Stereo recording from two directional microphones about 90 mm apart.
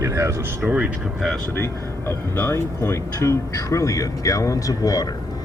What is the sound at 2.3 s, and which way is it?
Speech, 25° left (ahead or behind).